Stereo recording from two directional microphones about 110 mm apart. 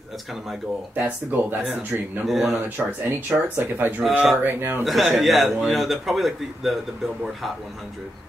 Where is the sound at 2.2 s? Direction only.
Centre (ahead or behind).